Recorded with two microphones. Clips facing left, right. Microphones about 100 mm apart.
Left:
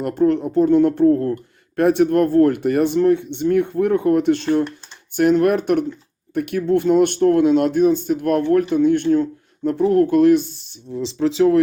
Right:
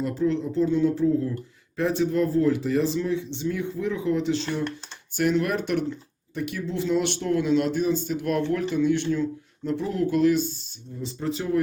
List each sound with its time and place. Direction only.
0.0 s speech: 55° left (ahead or behind)
10.9 s speech: 90° left